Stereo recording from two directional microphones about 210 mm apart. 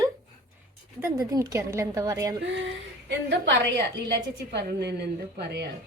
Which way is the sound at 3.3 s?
55° right (ahead or behind).